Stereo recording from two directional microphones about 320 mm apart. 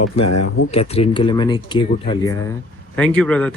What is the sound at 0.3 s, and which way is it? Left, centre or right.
Speech, left.